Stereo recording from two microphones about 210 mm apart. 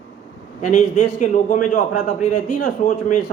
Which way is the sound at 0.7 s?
35° left (ahead or behind).